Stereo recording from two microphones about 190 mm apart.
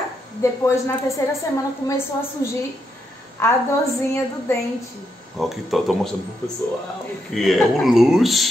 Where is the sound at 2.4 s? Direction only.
20° left (ahead or behind).